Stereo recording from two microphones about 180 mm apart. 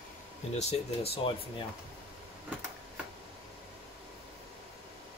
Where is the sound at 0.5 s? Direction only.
35° left (ahead or behind).